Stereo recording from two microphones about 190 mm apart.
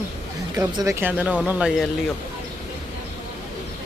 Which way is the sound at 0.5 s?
20° right (ahead or behind).